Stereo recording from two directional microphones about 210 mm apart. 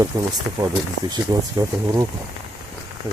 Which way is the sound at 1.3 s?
20° right (ahead or behind).